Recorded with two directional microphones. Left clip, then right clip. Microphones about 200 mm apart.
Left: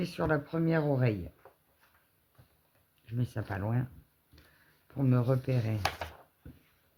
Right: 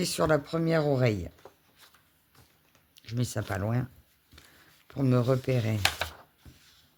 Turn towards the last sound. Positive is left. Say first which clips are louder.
# right 5 dB
turn(degrees=-50)  # may be behind; listen again after turning